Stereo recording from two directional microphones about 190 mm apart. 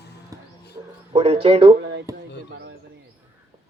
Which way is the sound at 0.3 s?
15° right (ahead or behind).